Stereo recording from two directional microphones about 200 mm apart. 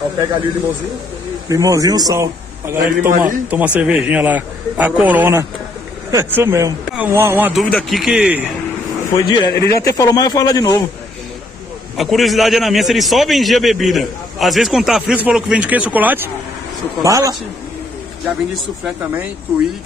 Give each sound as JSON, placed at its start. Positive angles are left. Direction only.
{"t": 1.5, "sound": "a man's voice", "side_deg": -15}
{"t": 3.1, "sound": "a man's voice", "side_deg": -40}
{"t": 3.4, "sound": "a man's voice", "side_deg": -5}
{"t": 9.1, "sound": "speech", "side_deg": 20}
{"t": 12.0, "sound": "a man's voice", "side_deg": 0}